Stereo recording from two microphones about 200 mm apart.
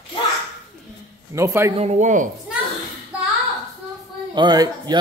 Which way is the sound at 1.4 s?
15° right (ahead or behind).